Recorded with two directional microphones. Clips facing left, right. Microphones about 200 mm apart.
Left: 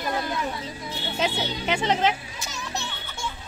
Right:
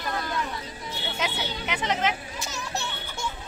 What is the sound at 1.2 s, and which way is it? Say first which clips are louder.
Music: left 5 dB; 30° left (ahead or behind).